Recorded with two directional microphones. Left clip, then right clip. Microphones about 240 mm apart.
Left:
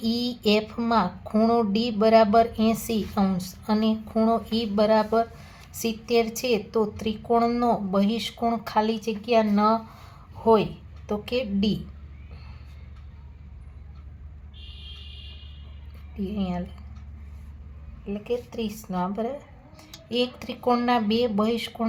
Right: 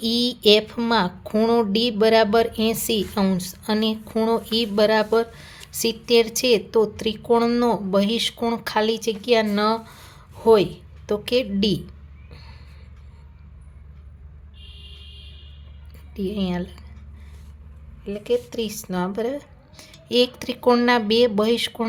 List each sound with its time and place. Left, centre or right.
0.0 s a woman's voice: right
16.1 s speech: right
18.0 s speech: right